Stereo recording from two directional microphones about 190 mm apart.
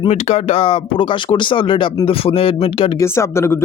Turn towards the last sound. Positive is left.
turn(degrees=15)  # may be behind; listen again after turning